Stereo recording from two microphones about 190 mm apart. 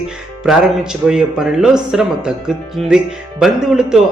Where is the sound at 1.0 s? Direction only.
5° right (ahead or behind).